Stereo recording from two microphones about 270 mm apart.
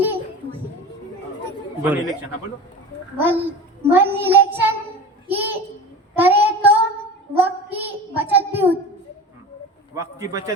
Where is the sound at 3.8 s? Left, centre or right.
Centre.